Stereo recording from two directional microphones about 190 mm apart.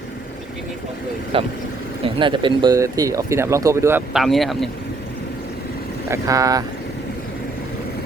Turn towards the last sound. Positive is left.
turn(degrees=-20)  # may be behind; listen again after turning